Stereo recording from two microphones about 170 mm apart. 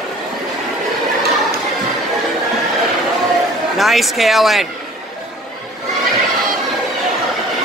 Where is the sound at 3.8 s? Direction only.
Centre (ahead or behind).